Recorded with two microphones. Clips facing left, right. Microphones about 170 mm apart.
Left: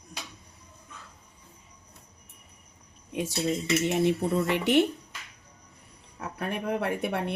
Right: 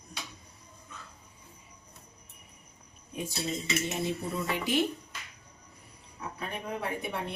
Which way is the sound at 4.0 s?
70° left (ahead or behind).